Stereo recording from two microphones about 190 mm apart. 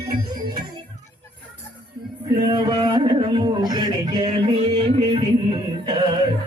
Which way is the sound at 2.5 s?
25° right (ahead or behind).